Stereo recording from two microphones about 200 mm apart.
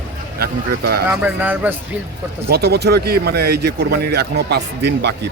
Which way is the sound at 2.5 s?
55° right (ahead or behind).